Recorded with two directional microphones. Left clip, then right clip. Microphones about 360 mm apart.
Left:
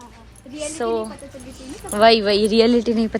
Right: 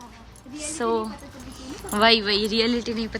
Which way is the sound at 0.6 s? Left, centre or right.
Centre.